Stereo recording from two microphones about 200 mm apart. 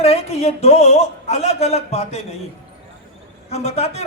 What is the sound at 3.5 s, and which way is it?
Speech, 35° left (ahead or behind).